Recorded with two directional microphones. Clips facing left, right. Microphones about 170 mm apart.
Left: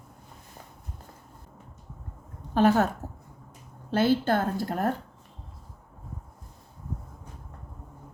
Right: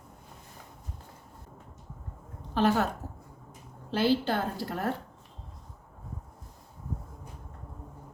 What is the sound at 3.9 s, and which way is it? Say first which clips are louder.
A woman's voice: left 3 dB; 50° left (ahead or behind).